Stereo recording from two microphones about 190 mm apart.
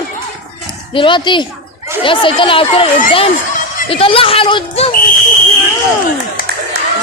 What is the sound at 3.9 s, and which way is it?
Speech, 30° left (ahead or behind).